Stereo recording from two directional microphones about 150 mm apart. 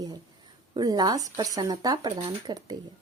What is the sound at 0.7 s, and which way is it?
A woman's voice, 25° right (ahead or behind).